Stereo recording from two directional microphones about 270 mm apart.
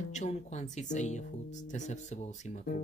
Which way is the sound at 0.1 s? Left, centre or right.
Left.